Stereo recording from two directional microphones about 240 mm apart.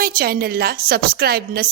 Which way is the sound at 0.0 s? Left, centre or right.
Right.